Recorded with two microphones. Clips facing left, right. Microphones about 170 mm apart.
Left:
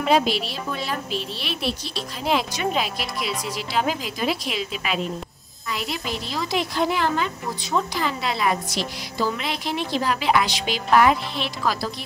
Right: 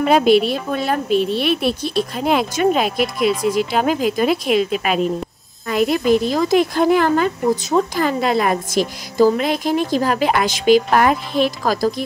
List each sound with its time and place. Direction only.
0.0 s speech: 50° right (ahead or behind)